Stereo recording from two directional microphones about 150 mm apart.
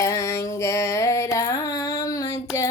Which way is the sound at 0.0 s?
20° left (ahead or behind).